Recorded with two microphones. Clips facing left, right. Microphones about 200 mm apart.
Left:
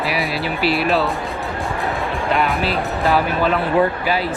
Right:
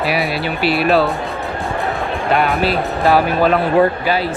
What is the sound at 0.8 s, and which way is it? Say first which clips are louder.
Speech: right 7 dB; 65° right (ahead or behind).